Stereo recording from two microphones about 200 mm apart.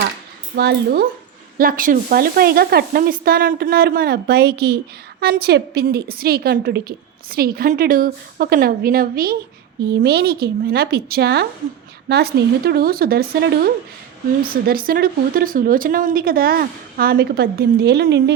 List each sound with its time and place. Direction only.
0.5 s a woman's voice: 55° right (ahead or behind)